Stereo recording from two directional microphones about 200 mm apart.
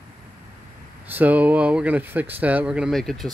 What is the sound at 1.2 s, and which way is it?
Speech, 5° right (ahead or behind).